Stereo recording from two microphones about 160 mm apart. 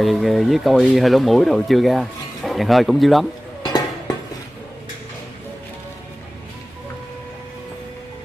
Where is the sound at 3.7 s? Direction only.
25° left (ahead or behind).